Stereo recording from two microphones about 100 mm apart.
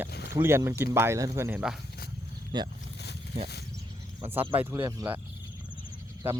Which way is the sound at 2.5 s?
45° right (ahead or behind).